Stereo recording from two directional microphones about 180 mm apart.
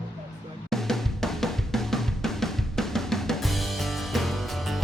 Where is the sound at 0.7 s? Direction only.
Centre (ahead or behind).